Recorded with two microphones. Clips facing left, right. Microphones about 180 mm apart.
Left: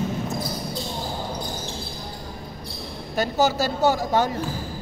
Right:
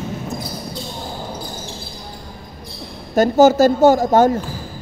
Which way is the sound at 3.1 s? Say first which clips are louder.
Right 10 dB; 45° right (ahead or behind).